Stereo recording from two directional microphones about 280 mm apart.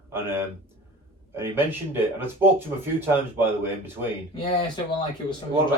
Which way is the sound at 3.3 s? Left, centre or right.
Centre.